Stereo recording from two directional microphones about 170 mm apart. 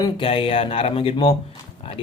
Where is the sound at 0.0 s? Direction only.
30° left (ahead or behind).